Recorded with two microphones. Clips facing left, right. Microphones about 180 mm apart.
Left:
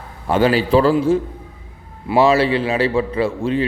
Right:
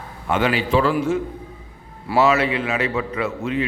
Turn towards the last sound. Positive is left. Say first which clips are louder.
# left 5 dB
turn(degrees=30)  # may be behind; listen again after turning